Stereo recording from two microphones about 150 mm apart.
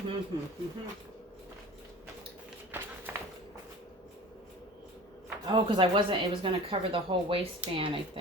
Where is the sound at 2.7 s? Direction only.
15° right (ahead or behind).